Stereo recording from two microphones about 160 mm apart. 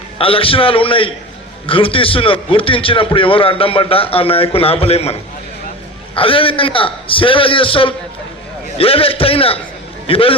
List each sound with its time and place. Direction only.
0.2 s a man's voice: 35° left (ahead or behind)
6.1 s a man's voice: 35° left (ahead or behind)